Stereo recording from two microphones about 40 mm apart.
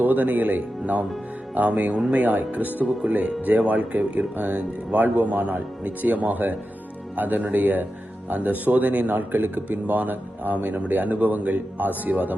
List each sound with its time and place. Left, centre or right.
0.0 s speech: right
3.1 s speech: right
9.0 s speech: right